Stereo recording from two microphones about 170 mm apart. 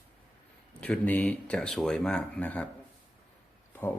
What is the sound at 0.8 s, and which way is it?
Speech, 10° left (ahead or behind).